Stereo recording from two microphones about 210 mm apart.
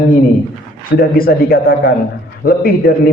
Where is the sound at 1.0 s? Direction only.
45° left (ahead or behind).